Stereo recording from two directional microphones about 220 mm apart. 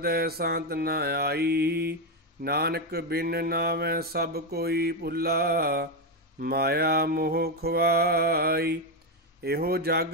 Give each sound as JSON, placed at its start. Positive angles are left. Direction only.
{"t": 0.0, "sound": "mantra", "side_deg": -45}